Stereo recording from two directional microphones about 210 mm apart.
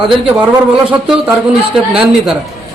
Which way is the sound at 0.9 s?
5° right (ahead or behind).